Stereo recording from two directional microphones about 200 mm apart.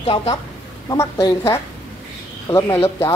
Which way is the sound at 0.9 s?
15° left (ahead or behind).